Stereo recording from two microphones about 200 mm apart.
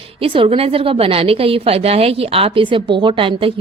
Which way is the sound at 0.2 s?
30° right (ahead or behind).